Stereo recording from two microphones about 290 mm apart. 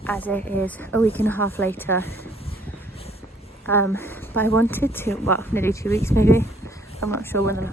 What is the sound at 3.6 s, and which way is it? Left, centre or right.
A woman's voice, centre.